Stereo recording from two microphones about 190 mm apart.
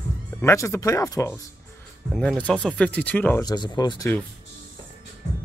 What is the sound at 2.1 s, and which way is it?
Speech, 5° left (ahead or behind).